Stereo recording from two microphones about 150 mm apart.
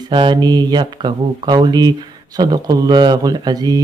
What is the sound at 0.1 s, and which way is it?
Speech, 30° right (ahead or behind).